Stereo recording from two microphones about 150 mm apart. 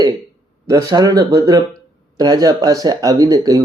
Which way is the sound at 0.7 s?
25° right (ahead or behind).